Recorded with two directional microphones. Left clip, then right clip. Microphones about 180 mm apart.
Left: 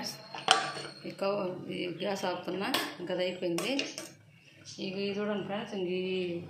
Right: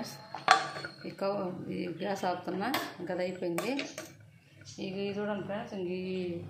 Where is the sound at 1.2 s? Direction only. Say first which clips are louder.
Left 1 dB; 50° right (ahead or behind).